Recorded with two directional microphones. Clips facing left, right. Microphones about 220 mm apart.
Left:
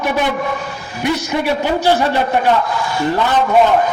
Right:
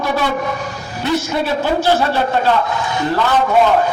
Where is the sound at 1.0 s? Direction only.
15° left (ahead or behind).